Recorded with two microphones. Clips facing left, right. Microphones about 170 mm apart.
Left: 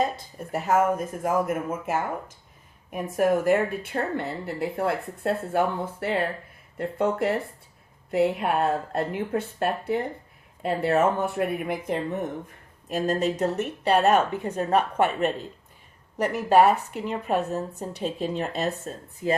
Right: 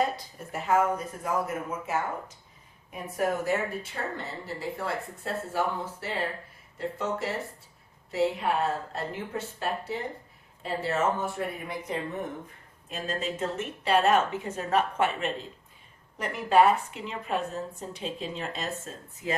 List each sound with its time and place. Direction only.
0.3 s a woman's voice: 40° left (ahead or behind); by 11.9 s 55° left (ahead or behind)
12.9 s a woman's voice: 45° left (ahead or behind)
14.9 s a woman's voice: 55° left (ahead or behind)
16.1 s speech: 40° left (ahead or behind); by 18.7 s 55° left (ahead or behind)
19.2 s speech: 45° left (ahead or behind)